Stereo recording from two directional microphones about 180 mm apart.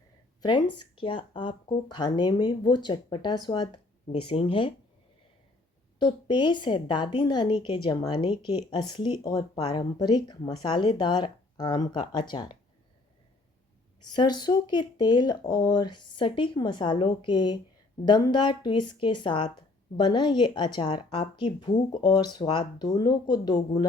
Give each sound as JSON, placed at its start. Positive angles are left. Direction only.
{"t": 0.4, "sound": "speech", "side_deg": 25}
{"t": 6.0, "sound": "speech", "side_deg": 25}
{"t": 14.1, "sound": "speech", "side_deg": 25}